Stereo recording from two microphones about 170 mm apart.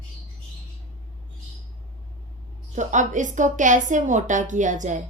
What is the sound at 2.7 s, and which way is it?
A woman's voice, 45° right (ahead or behind).